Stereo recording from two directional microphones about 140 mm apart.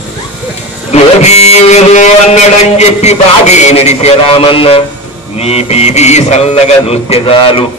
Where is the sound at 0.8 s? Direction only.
50° left (ahead or behind).